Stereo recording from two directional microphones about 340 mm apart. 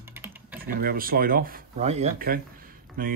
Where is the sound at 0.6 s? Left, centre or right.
Right.